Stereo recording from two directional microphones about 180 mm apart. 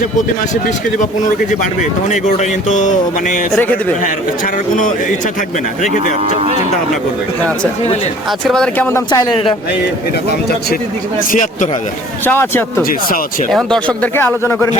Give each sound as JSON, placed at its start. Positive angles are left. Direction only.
{"t": 1.5, "sound": "speech", "side_deg": 40}
{"t": 3.5, "sound": "a man's voice", "side_deg": 10}
{"t": 8.4, "sound": "a man's voice", "side_deg": 5}
{"t": 9.0, "sound": "a man's voice", "side_deg": 25}
{"t": 11.3, "sound": "speech", "side_deg": 45}
{"t": 12.2, "sound": "a man's voice", "side_deg": 10}
{"t": 12.8, "sound": "speech", "side_deg": 55}
{"t": 13.5, "sound": "a man's voice", "side_deg": 5}